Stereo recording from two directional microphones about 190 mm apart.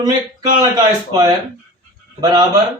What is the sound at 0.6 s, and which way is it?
Speech, 20° right (ahead or behind).